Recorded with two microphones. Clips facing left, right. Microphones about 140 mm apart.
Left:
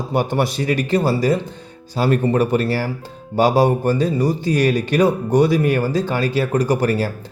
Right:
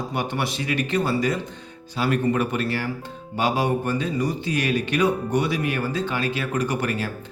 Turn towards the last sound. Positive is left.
turn(degrees=35)  # may be behind; listen again after turning